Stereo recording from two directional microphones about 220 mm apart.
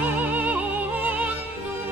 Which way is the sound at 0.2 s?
5° right (ahead or behind).